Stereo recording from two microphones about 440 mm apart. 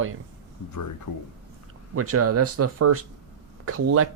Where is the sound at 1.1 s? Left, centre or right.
Left.